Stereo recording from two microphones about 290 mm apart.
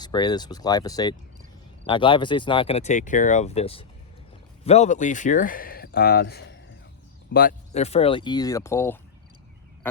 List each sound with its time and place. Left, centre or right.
0.0 s speech: centre